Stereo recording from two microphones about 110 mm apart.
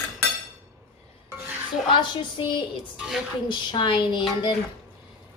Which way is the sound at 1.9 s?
45° left (ahead or behind).